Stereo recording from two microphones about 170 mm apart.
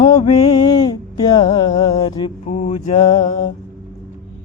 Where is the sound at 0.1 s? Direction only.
45° left (ahead or behind).